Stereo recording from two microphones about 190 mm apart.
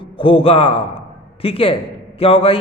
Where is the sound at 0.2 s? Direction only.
30° left (ahead or behind).